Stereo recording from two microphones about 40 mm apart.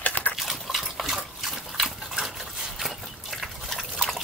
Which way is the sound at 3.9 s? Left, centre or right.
Centre.